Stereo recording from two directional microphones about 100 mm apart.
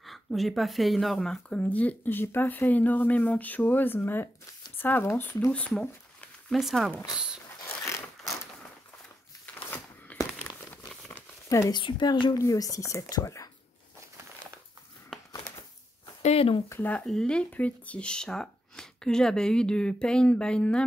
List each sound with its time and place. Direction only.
0.0 s speech: centre (ahead or behind)
6.5 s speech: centre (ahead or behind)
10.1 s a sound: 15° left (ahead or behind)
10.7 s crumpling: 20° left (ahead or behind)
11.4 s speech: 30° left (ahead or behind)
11.7 s speech: 50° left (ahead or behind)
16.2 s speech: 85° left
17.0 s speech: 5° left (ahead or behind)